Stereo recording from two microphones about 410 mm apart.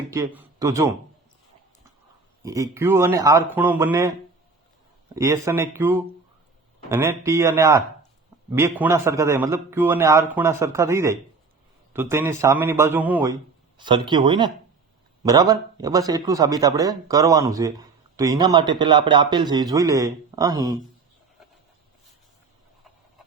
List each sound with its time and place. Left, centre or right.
0.1 s a man's voice: centre
2.4 s speech: centre
5.1 s speech: centre